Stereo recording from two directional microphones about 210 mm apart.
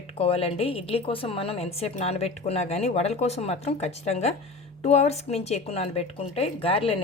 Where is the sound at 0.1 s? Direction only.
25° left (ahead or behind).